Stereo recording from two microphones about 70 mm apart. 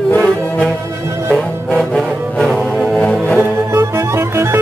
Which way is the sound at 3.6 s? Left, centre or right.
Right.